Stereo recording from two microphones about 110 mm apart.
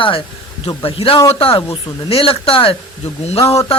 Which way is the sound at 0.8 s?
60° left (ahead or behind).